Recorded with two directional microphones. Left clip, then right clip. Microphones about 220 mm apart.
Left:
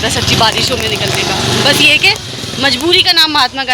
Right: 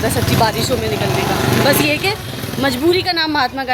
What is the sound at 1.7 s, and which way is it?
Speech, 10° right (ahead or behind).